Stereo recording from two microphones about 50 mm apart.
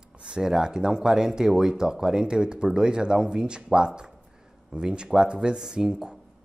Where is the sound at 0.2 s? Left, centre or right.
Centre.